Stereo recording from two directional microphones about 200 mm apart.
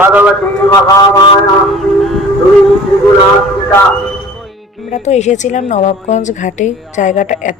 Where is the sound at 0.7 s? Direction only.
15° left (ahead or behind).